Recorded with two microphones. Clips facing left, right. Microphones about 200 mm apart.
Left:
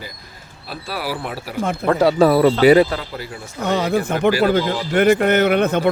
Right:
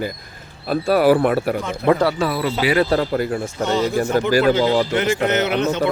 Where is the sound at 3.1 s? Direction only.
55° right (ahead or behind).